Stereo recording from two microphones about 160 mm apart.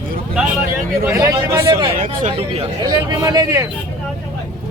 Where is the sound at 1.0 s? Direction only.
20° right (ahead or behind).